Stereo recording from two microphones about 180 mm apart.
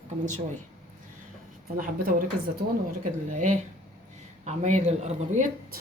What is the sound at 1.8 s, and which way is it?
A woman's voice, 50° right (ahead or behind).